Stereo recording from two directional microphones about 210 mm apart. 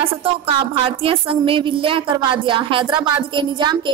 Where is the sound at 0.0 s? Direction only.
25° right (ahead or behind).